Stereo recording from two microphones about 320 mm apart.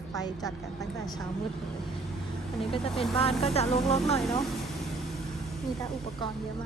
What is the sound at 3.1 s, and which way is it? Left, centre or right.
Speech, centre.